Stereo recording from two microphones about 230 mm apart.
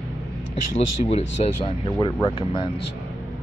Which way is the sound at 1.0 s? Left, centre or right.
Left.